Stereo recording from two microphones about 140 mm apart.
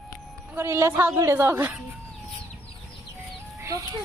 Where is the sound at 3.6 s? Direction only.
20° right (ahead or behind).